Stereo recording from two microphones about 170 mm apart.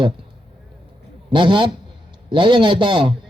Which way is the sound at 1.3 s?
30° right (ahead or behind).